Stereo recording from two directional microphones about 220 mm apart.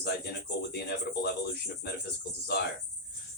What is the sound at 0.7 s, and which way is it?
Speech, 50° left (ahead or behind).